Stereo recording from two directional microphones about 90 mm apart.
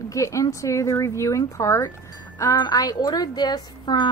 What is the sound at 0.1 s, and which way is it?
A woman's voice, 35° left (ahead or behind).